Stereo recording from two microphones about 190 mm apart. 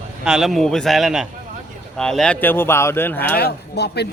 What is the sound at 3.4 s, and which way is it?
Speech, 60° left (ahead or behind).